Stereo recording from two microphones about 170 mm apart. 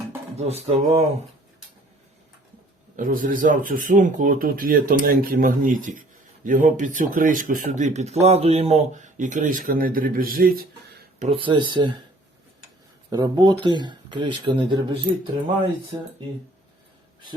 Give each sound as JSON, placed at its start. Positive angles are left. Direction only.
{"t": 0.3, "sound": "a sound", "side_deg": -40}
{"t": 2.9, "sound": "speech", "side_deg": -50}
{"t": 11.2, "sound": "speech", "side_deg": -35}
{"t": 13.1, "sound": "speech", "side_deg": -25}